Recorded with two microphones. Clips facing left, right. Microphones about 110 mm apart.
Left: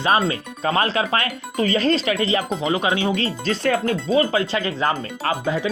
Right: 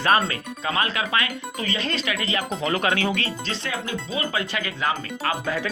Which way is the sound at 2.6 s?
20° left (ahead or behind).